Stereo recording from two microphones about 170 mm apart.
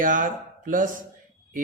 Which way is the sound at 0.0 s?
50° right (ahead or behind).